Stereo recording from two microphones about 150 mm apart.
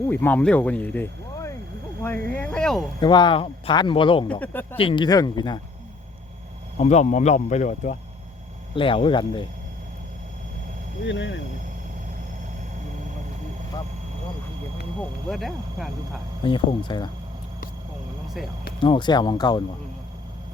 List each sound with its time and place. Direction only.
0.1 s speech: 10° left (ahead or behind)
3.0 s speech: 30° left (ahead or behind)
4.3 s speech: 10° left (ahead or behind)
4.8 s speech: 35° left (ahead or behind)
6.7 s speech: 50° left (ahead or behind)
8.7 s speech: 35° left (ahead or behind)
15.3 s speech: centre (ahead or behind)
16.4 s speech: 30° left (ahead or behind)
18.8 s speech: 30° left (ahead or behind)